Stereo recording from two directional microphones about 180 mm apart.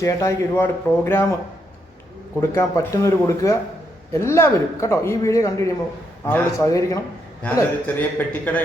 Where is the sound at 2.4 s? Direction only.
15° left (ahead or behind).